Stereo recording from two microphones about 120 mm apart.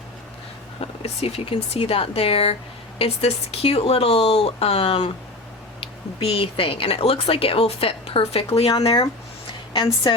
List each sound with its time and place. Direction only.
1.0 s speech: 55° left (ahead or behind); by 10.2 s 40° left (ahead or behind)